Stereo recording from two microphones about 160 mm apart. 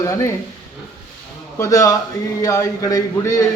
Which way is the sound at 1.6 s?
20° left (ahead or behind).